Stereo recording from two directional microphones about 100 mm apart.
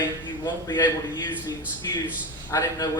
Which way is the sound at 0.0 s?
45° left (ahead or behind).